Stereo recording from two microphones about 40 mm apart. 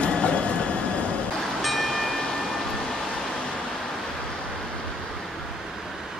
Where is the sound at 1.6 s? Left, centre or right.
Centre.